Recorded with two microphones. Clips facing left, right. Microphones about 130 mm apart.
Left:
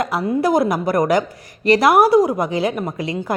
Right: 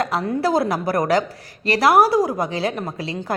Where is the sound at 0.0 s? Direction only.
10° left (ahead or behind).